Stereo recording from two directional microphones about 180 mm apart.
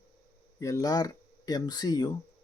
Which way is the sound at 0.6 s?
20° left (ahead or behind).